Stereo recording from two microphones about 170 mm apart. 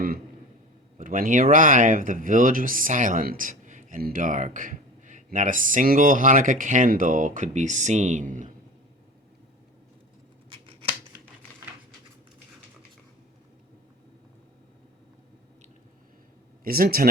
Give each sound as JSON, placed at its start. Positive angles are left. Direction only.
{"t": 0.9, "sound": "speech", "side_deg": -55}
{"t": 16.6, "sound": "speech", "side_deg": -60}